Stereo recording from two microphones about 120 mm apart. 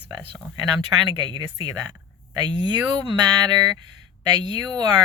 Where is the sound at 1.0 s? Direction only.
40° right (ahead or behind).